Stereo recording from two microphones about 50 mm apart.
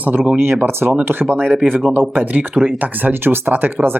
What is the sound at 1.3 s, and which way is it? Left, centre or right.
Speech, right.